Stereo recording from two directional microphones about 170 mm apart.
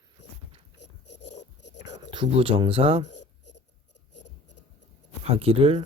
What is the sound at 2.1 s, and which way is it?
Speech, 30° right (ahead or behind).